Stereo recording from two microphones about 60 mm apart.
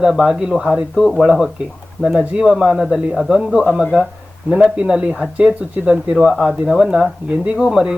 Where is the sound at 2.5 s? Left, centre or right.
Centre.